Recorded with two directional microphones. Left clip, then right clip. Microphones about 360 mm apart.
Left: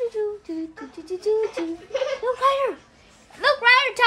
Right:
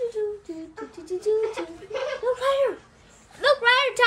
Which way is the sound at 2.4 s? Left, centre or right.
Centre.